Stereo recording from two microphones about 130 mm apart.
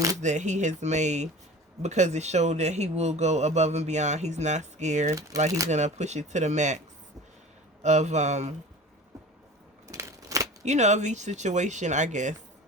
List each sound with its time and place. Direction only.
0.2 s speech: 65° right (ahead or behind)
9.9 s scissors: 25° right (ahead or behind)
10.6 s speech: 60° right (ahead or behind)